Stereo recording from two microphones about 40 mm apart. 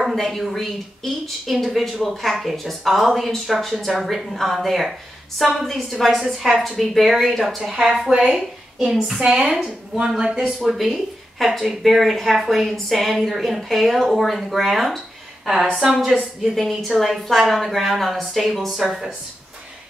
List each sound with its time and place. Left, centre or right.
0.1 s speech: centre
6.2 s a woman's voice: centre
8.1 s a woman's voice: centre
9.2 s speech: centre
10.6 s speech: centre
15.8 s a woman's voice: centre
16.5 s speech: centre